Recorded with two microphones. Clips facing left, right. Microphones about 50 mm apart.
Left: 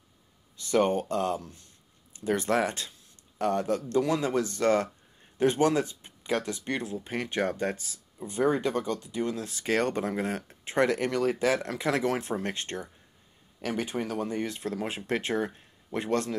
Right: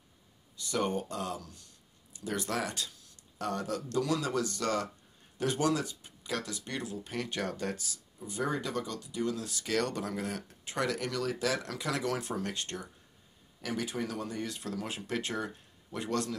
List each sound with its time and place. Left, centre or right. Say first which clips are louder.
0.6 s speech: left 7 dB; left